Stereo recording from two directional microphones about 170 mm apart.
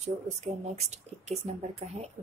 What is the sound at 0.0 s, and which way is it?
Speech, 40° right (ahead or behind).